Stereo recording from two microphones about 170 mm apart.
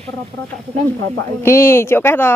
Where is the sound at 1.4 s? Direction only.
15° left (ahead or behind).